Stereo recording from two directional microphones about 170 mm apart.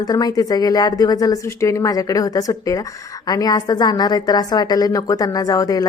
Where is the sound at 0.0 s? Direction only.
20° left (ahead or behind).